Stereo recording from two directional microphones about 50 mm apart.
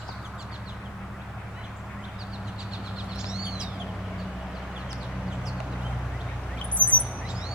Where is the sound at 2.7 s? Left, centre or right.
Centre.